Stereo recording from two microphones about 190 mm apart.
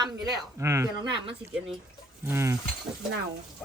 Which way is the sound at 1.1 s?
25° right (ahead or behind).